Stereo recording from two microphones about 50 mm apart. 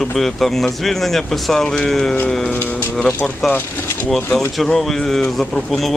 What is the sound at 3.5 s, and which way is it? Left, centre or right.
Speech, left.